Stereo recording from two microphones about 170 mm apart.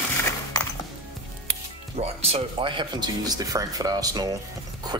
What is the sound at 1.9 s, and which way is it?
Speech, 35° right (ahead or behind).